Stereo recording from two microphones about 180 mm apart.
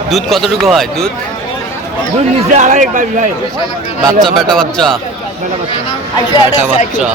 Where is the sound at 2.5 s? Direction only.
45° right (ahead or behind).